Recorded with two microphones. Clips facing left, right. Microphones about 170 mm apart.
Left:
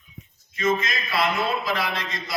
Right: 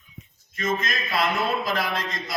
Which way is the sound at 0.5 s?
45° right (ahead or behind).